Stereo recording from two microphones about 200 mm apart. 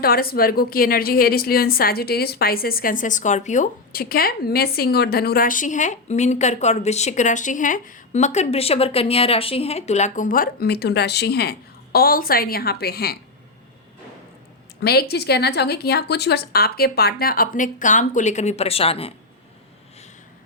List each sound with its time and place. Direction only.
0.0 s a woman's voice: 50° left (ahead or behind)
14.8 s a woman's voice: 55° left (ahead or behind); by 19.1 s 30° left (ahead or behind)